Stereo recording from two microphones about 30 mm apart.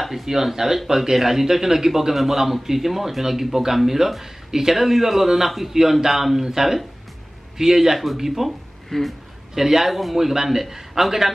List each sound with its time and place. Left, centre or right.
0.0 s a man's voice: centre
8.5 s a sound: centre
9.6 s a man's voice: centre